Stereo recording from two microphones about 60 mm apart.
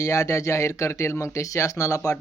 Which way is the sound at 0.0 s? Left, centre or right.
Left.